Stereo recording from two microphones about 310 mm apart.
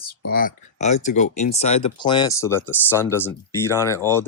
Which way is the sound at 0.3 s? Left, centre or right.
Left.